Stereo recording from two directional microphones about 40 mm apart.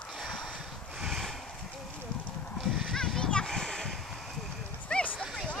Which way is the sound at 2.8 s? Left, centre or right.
Centre.